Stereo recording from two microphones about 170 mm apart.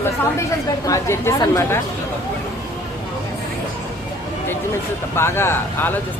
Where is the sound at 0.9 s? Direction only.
15° left (ahead or behind).